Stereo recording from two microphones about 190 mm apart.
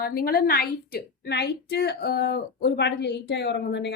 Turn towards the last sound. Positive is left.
turn(degrees=65)  # may be behind; listen again after turning